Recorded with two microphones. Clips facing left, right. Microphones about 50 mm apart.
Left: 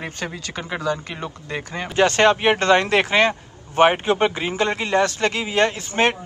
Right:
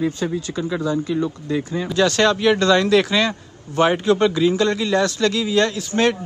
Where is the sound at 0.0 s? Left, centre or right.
Left.